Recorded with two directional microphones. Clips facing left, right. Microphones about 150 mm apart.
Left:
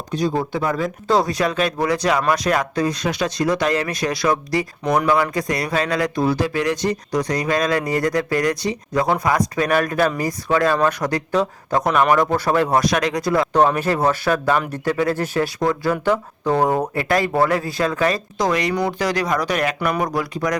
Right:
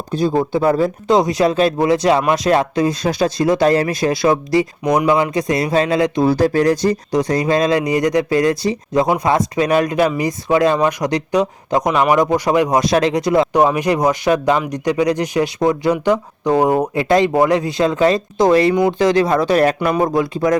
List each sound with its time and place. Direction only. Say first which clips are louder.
0.3 s speech: right 6 dB; 30° right (ahead or behind)
1.0 s speech: right 3 dB; 20° right (ahead or behind)
6.3 s speech: right 6 dB; 35° right (ahead or behind)
7.1 s speech: right 4 dB; 25° right (ahead or behind)
12.9 s speech: right 5 dB; 25° right (ahead or behind)